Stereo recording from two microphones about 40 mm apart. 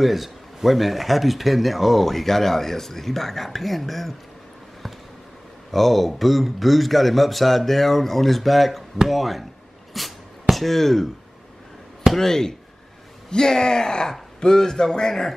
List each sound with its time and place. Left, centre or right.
0.0 s speech: centre
5.7 s speech: centre
12.2 s a man's voice: centre